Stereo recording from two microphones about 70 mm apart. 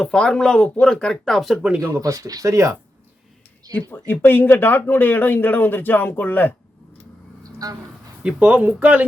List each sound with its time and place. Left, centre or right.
0.0 s speech: centre
1.8 s speech: right
3.8 s speech: left
7.6 s speech: right
8.2 s speech: centre